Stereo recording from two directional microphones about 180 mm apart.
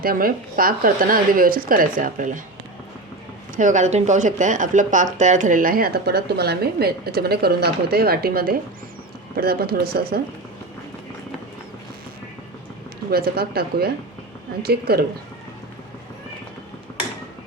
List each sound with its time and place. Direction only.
0.0 s speech: 55° right (ahead or behind)
3.5 s speech: 45° right (ahead or behind)
13.1 s speech: 60° right (ahead or behind)